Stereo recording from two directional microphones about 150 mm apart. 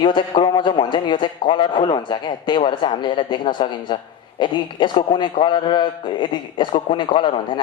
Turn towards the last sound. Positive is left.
turn(degrees=35)  # may be behind; listen again after turning